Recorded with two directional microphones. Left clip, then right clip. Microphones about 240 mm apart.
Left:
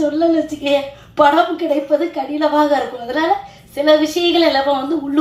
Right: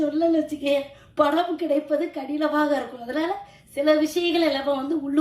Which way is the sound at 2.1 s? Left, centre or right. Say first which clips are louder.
Left 8 dB; right.